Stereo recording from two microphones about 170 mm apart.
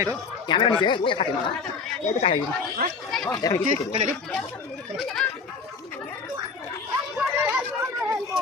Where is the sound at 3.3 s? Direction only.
15° left (ahead or behind).